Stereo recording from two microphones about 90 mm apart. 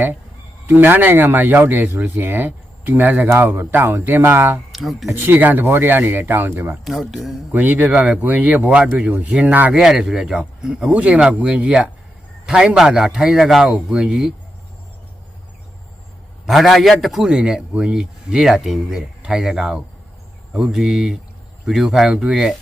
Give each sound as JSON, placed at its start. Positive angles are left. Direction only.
{"t": 0.7, "sound": "speech", "side_deg": -20}
{"t": 4.7, "sound": "speech", "side_deg": 0}
{"t": 5.0, "sound": "speech", "side_deg": -25}
{"t": 6.8, "sound": "speech", "side_deg": 0}
{"t": 7.5, "sound": "speech", "side_deg": -20}
{"t": 9.7, "sound": "speech", "side_deg": -5}
{"t": 16.5, "sound": "speech", "side_deg": 0}